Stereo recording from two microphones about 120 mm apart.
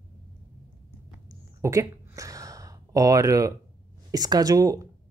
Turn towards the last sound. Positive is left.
turn(degrees=-30)  # may be behind; listen again after turning